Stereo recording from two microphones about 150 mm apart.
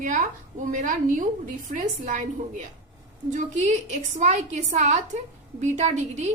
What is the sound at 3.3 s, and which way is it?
A woman's voice, 55° right (ahead or behind).